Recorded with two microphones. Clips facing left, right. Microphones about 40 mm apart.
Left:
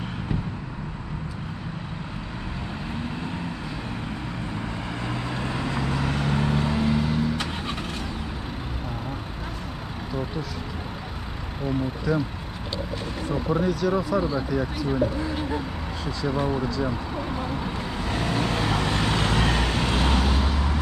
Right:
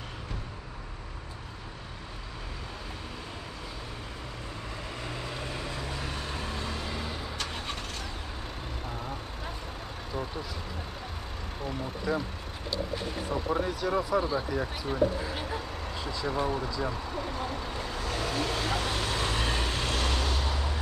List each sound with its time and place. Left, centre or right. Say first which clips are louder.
5.1 s vehicle: left 8 dB; left; by 7.2 s centre
12.1 s speech: left 5 dB; centre
13.3 s speech: left 5 dB; centre
13.7 s speech: left 7 dB; centre
13.9 s speech: left 4 dB; centre
16.3 s speech: left 5 dB; centre
17.9 s vehicle: left 5 dB; left